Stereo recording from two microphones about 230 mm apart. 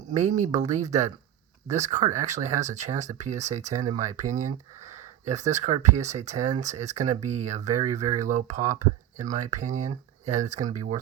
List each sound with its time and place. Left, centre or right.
0.1 s speech: right